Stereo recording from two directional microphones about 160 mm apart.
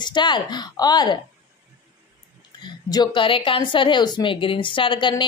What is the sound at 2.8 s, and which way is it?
A woman's voice, 25° left (ahead or behind).